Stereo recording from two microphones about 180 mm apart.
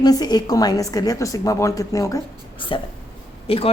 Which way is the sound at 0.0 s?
20° left (ahead or behind).